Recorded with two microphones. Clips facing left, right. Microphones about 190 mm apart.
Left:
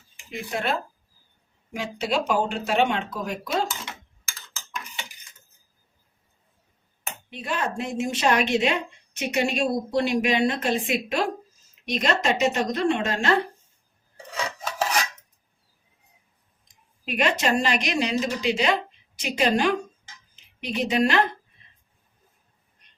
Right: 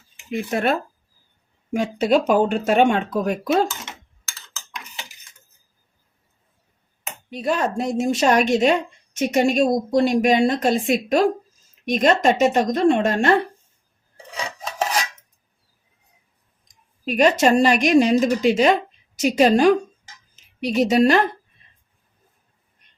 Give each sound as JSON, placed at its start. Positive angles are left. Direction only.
{"t": 0.3, "sound": "speech", "side_deg": -55}
{"t": 7.3, "sound": "speech", "side_deg": -40}
{"t": 17.1, "sound": "a woman's voice", "side_deg": -40}